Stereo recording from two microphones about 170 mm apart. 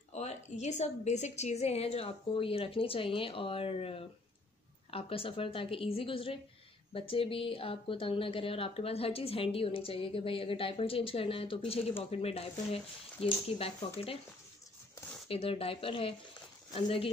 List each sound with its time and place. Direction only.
0.1 s speech: 40° left (ahead or behind)
15.2 s speech: 35° left (ahead or behind)